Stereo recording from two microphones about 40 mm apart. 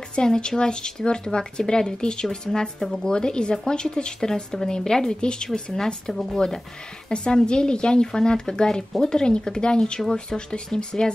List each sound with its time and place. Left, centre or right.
0.1 s speech: left
2.8 s speech: centre
3.1 s speech: left
7.1 s speech: left